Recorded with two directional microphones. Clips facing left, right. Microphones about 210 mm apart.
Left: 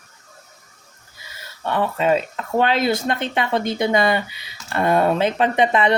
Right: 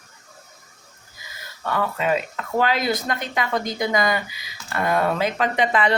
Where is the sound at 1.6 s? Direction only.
30° left (ahead or behind).